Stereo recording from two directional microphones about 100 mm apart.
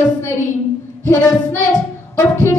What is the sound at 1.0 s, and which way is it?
Child singing, 25° left (ahead or behind).